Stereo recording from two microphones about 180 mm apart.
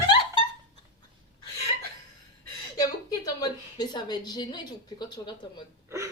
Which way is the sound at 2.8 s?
20° left (ahead or behind).